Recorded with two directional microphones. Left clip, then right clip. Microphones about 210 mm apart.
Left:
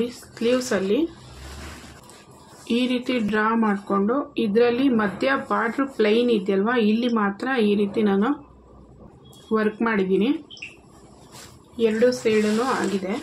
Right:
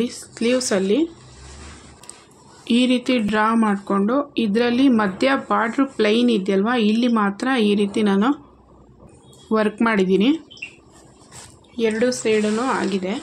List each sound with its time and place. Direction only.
0.0 s speech: 40° right (ahead or behind)
2.7 s speech: 45° right (ahead or behind)
9.5 s speech: 50° right (ahead or behind)
11.7 s speech: 45° right (ahead or behind)